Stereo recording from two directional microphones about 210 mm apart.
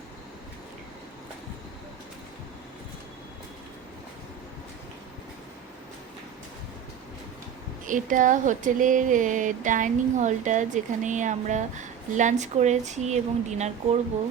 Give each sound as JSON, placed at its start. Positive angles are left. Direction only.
{"t": 7.9, "sound": "speech", "side_deg": -40}